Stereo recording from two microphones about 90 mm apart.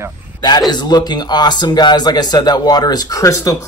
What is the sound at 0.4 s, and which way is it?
Speech, 50° left (ahead or behind).